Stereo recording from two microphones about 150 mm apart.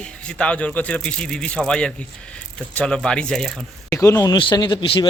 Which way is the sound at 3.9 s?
20° left (ahead or behind).